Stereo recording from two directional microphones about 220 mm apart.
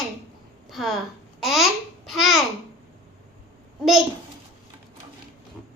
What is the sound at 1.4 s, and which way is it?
Babbling, centre (ahead or behind).